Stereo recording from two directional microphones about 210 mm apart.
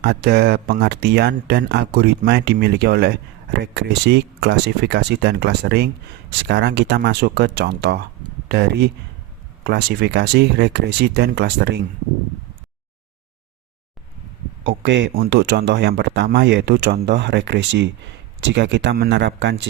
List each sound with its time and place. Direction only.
0.0 s speech: 50° right (ahead or behind)
14.6 s speech: 60° right (ahead or behind)